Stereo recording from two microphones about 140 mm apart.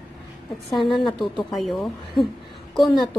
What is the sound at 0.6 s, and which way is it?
Speech, 40° left (ahead or behind).